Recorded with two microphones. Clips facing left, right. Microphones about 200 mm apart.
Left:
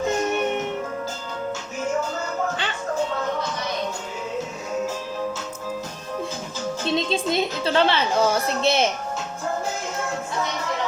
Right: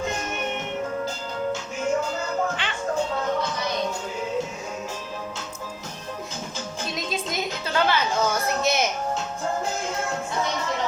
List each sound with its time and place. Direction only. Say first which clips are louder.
6.8 s music: left 7 dB; 30° left (ahead or behind)